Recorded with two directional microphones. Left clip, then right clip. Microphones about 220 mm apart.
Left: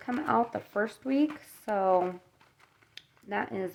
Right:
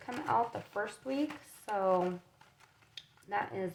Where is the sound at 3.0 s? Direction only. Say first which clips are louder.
Left 2 dB; 50° left (ahead or behind).